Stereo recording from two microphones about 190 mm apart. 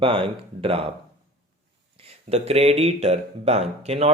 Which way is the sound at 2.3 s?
30° right (ahead or behind).